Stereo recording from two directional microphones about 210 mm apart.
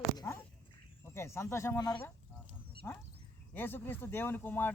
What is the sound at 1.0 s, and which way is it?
Speech, 10° left (ahead or behind).